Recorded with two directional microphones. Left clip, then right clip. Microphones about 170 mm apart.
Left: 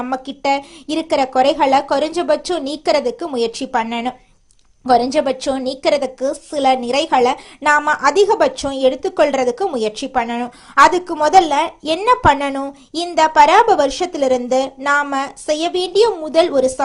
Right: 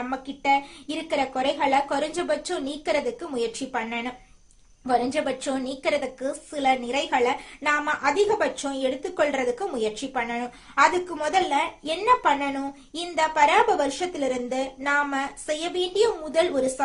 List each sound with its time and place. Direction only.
0.1 s a woman's voice: 45° left (ahead or behind)